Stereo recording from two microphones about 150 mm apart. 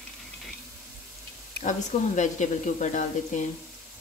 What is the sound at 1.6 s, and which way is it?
Speech, 55° left (ahead or behind).